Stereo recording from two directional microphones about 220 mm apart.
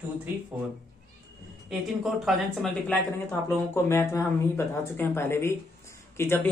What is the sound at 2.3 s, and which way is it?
Speech, centre (ahead or behind).